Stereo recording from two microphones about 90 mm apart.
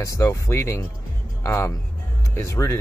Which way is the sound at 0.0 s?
35° left (ahead or behind).